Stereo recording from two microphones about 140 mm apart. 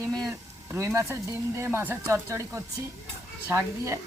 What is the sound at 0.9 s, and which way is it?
Speech, 20° right (ahead or behind).